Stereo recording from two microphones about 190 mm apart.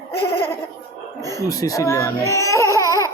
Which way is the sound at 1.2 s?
20° right (ahead or behind).